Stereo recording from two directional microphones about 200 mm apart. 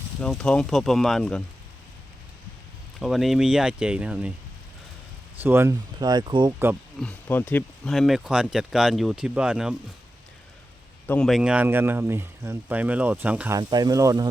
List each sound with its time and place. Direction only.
0.2 s speech: 5° left (ahead or behind)
3.0 s speech: centre (ahead or behind)
5.4 s speech: 10° right (ahead or behind)
7.0 s speech: 10° left (ahead or behind)
11.0 s speech: 5° left (ahead or behind)
13.6 s speech: 20° right (ahead or behind)